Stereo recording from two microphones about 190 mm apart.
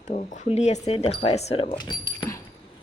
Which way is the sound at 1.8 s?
20° left (ahead or behind).